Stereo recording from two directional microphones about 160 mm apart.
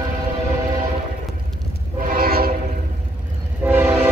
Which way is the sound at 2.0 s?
65° right (ahead or behind).